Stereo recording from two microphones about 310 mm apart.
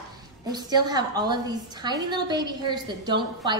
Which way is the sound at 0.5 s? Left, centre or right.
Centre.